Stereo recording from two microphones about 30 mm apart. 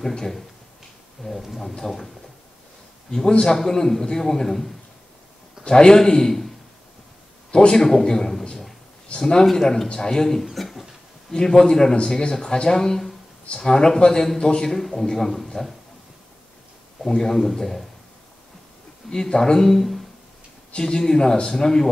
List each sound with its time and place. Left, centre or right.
1.2 s a man's voice: centre
3.3 s a man's voice: left
5.6 s speech: left
7.5 s speech: left
7.8 s a man's voice: centre
10.4 s a sound: centre
11.3 s speech: left
14.7 s a man's voice: centre
17.0 s a man's voice: centre
19.0 s speech: left
20.8 s a man's voice: centre